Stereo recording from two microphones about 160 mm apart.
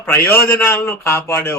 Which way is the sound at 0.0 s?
15° left (ahead or behind).